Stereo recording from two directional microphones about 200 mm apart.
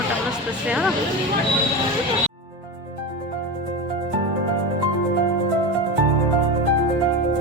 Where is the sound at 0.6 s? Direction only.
5° right (ahead or behind).